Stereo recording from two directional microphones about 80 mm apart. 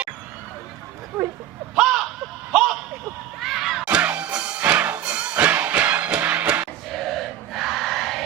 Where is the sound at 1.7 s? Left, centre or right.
Centre.